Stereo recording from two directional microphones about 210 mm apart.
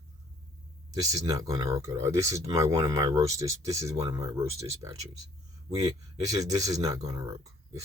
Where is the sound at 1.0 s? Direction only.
15° right (ahead or behind).